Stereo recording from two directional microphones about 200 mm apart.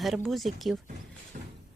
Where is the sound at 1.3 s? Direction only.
45° right (ahead or behind).